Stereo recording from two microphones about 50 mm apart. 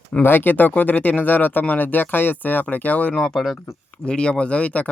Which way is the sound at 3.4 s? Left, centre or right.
Centre.